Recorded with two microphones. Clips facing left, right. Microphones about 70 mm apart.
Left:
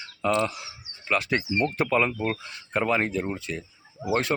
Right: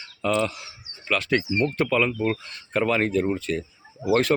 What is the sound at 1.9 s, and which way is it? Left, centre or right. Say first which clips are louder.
Speech: left 1 dB; left.